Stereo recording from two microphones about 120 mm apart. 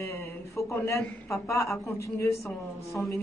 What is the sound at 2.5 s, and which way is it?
Speech, centre (ahead or behind).